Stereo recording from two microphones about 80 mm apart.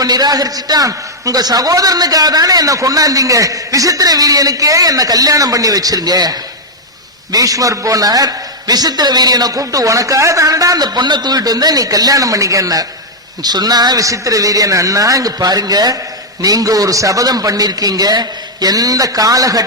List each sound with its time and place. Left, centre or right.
0.0 s a man's voice: right
14.0 s a man's voice: right